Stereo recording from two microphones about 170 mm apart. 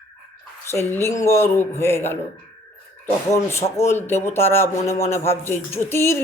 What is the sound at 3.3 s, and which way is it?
Speech, 15° left (ahead or behind).